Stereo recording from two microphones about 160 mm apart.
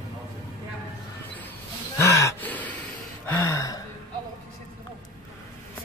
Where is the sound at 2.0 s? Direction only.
20° left (ahead or behind).